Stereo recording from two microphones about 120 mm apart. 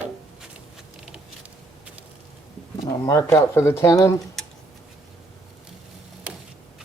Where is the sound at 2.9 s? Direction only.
25° left (ahead or behind).